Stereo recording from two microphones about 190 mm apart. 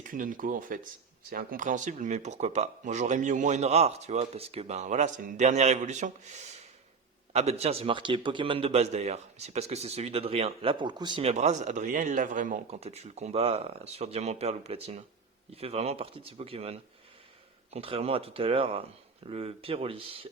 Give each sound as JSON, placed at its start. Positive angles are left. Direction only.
{"t": 0.0, "sound": "a man's voice", "side_deg": -45}